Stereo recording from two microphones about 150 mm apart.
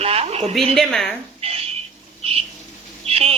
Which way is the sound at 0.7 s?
Centre (ahead or behind).